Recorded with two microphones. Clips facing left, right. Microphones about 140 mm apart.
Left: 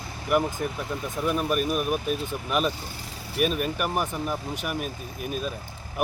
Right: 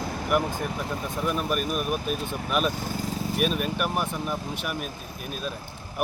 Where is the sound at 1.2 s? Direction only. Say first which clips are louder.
Left 3 dB; centre (ahead or behind).